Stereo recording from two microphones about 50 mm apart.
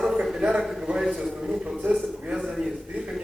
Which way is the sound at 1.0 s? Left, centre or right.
Centre.